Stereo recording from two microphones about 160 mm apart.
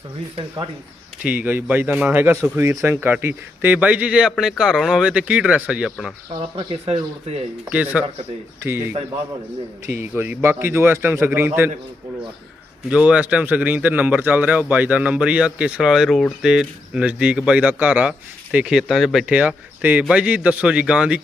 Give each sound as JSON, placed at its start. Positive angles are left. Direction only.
{"t": 1.2, "sound": "speech", "side_deg": -10}
{"t": 6.6, "sound": "speech", "side_deg": -35}
{"t": 7.7, "sound": "speech", "side_deg": -10}
{"t": 10.0, "sound": "speech", "side_deg": -15}
{"t": 12.9, "sound": "speech", "side_deg": -10}